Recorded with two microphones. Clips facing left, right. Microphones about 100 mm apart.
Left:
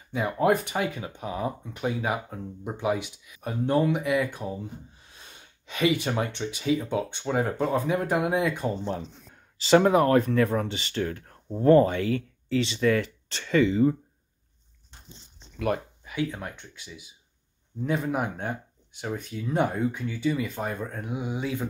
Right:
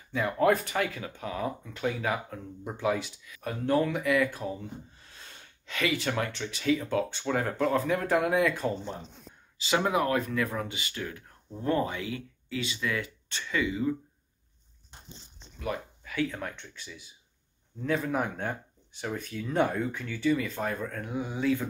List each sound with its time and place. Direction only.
0.1 s speech: 20° left (ahead or behind)
8.8 s speech: 85° left
9.8 s speech: 40° left (ahead or behind)
11.2 s speech: 45° left (ahead or behind)
16.0 s speech: 20° left (ahead or behind)